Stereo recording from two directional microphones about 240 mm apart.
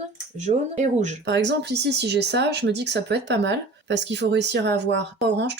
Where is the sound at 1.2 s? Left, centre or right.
Right.